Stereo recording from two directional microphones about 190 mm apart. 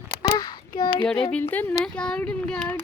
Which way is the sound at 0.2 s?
20° left (ahead or behind).